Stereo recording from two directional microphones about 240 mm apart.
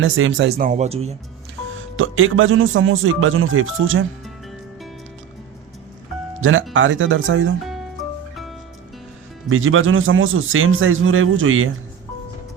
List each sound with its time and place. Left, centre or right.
0.0 s speech: right
2.0 s a man's voice: right
6.4 s speech: right
7.6 s music: centre
9.5 s a man's voice: right